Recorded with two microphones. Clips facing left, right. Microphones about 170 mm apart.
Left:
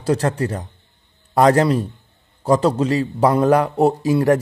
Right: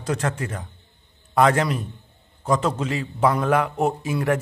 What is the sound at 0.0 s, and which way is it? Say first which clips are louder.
A man's voice: left 7 dB; 35° left (ahead or behind).